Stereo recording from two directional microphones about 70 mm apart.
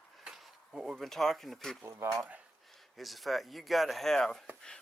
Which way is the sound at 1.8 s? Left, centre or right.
Right.